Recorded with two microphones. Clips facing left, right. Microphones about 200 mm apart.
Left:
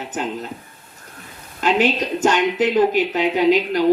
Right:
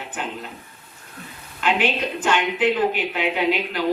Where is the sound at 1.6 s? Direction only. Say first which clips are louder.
Left 4 dB; 40° left (ahead or behind).